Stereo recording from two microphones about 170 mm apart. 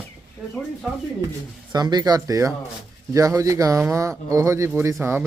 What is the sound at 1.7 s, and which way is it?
Speech, 25° right (ahead or behind).